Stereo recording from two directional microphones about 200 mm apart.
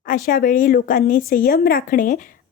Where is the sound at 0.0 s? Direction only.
45° left (ahead or behind).